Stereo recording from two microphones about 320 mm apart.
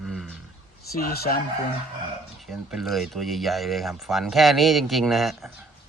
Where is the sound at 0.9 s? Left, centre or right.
Left.